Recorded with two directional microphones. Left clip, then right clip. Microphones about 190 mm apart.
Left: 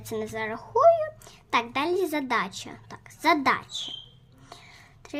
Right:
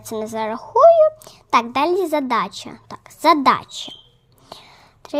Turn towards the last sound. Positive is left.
turn(degrees=-30)  # may be behind; listen again after turning